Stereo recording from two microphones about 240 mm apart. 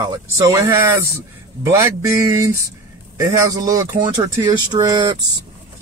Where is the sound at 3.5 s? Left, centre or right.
Centre.